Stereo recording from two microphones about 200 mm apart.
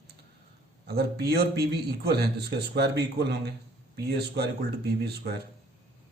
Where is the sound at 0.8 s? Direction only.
50° right (ahead or behind).